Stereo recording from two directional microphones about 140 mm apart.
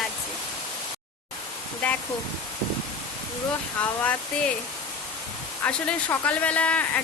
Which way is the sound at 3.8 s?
10° left (ahead or behind).